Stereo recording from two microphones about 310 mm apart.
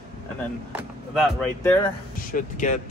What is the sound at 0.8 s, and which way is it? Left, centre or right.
Speech, centre.